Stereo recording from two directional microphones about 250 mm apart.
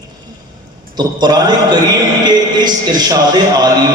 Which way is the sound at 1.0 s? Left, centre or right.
Centre.